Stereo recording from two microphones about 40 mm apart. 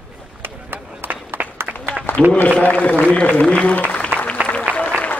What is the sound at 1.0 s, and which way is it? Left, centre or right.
Run, right.